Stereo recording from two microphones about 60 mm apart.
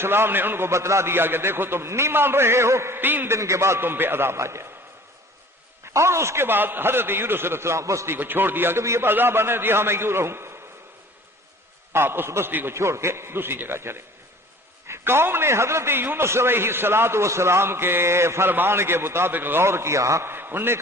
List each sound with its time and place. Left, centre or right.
0.0 s a man's voice: right
3.0 s a man's voice: right
3.3 s a man's voice: right
5.8 s a man's voice: right
8.1 s a man's voice: right
11.9 s a man's voice: right
12.7 s a man's voice: right
20.3 s a man's voice: right